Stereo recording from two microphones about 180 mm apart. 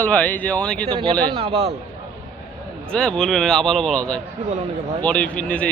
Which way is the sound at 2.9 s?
5° left (ahead or behind).